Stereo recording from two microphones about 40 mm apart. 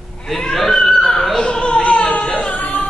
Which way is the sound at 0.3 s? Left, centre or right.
Centre.